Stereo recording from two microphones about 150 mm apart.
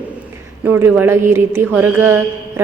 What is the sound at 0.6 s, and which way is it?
Speech, 15° right (ahead or behind).